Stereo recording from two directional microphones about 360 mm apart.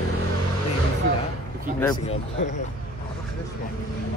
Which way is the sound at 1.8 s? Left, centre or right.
Centre.